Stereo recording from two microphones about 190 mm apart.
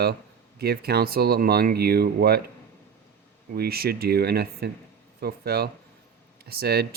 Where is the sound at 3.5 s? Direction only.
55° right (ahead or behind).